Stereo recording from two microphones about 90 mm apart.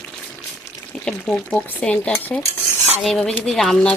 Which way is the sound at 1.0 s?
10° left (ahead or behind).